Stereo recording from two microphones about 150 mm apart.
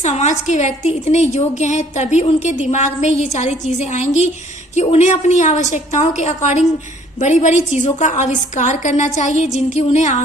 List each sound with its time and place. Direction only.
0.0 s a woman's voice: 50° left (ahead or behind)